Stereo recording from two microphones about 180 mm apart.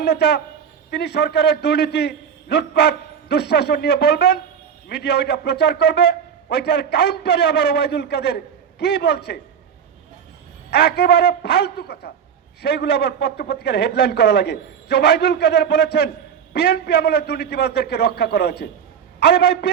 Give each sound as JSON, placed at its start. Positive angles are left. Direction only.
{"t": 0.0, "sound": "a man's voice", "side_deg": 65}
{"t": 10.7, "sound": "a man's voice", "side_deg": 65}